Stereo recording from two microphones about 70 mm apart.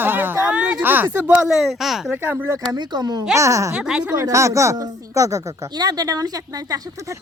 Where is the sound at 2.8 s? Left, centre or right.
Right.